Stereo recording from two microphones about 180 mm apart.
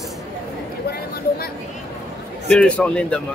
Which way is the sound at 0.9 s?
60° left (ahead or behind).